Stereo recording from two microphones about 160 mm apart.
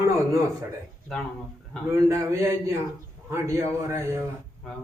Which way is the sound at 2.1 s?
20° right (ahead or behind).